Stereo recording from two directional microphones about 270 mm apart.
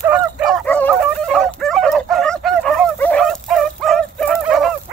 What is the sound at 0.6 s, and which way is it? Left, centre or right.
Dog, centre.